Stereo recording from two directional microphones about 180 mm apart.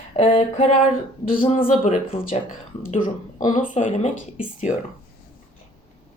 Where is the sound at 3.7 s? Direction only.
40° left (ahead or behind).